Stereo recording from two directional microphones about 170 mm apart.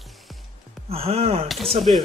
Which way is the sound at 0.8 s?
35° right (ahead or behind).